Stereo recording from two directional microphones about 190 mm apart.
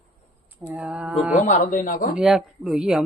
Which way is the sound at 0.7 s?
5° right (ahead or behind).